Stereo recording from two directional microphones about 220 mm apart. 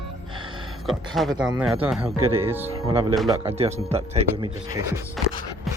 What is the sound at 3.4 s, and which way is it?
Speech, 25° right (ahead or behind).